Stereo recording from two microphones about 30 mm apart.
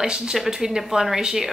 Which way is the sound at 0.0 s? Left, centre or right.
Right.